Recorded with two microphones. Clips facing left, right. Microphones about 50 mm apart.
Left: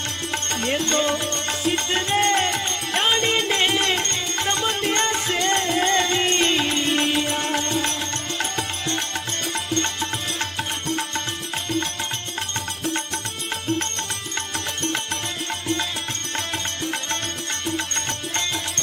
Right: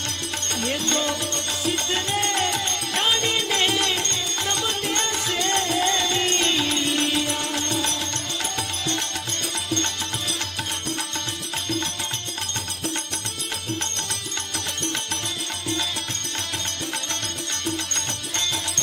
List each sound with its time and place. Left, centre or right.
0.5 s music: left
14.5 s music: left